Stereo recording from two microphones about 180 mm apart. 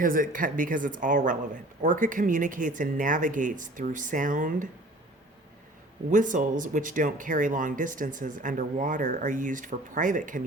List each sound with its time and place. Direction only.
0.0 s speech: 50° right (ahead or behind)
6.1 s speech: 45° right (ahead or behind)